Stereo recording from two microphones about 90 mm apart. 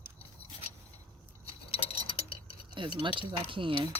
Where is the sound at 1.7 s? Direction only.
90° left.